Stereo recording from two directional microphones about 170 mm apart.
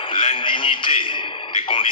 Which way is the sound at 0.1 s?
30° left (ahead or behind).